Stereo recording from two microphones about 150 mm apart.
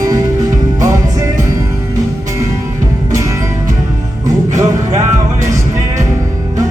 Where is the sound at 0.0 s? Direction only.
25° right (ahead or behind).